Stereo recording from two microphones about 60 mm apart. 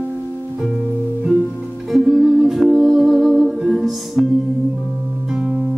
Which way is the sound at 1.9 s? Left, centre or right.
Centre.